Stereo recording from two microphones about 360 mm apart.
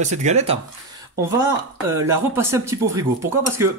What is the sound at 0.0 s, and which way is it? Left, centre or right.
Speech, centre.